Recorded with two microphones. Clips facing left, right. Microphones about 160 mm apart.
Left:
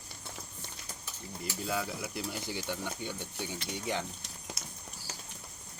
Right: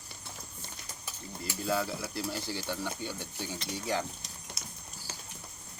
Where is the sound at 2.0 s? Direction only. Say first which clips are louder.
Right 2 dB; 15° left (ahead or behind).